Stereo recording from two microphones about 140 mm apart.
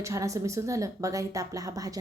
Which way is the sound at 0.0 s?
20° right (ahead or behind).